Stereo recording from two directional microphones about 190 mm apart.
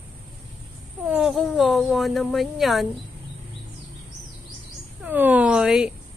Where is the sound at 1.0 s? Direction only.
5° right (ahead or behind).